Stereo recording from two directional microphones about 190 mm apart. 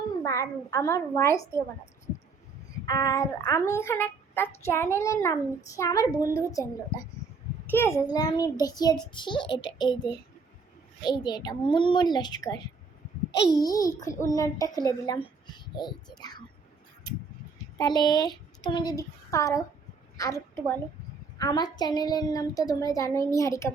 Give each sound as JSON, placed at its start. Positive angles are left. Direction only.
{"t": 0.7, "sound": "a woman's voice", "side_deg": 15}
{"t": 2.8, "sound": "a woman's voice", "side_deg": 15}
{"t": 7.7, "sound": "a child's voice", "side_deg": 15}
{"t": 17.7, "sound": "a woman's voice", "side_deg": 20}